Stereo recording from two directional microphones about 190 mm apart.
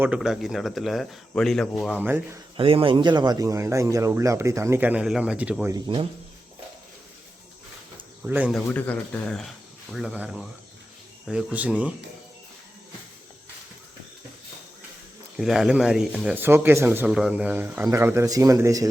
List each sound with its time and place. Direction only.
0.0 s speech: 5° right (ahead or behind)
2.0 s speech: 10° right (ahead or behind)
2.6 s speech: 25° right (ahead or behind); by 5.7 s 5° right (ahead or behind)
5.7 s speech: 30° right (ahead or behind)
8.2 s speech: 10° right (ahead or behind)
8.5 s speech: 5° left (ahead or behind)
15.4 s speech: centre (ahead or behind); by 18.9 s 20° right (ahead or behind)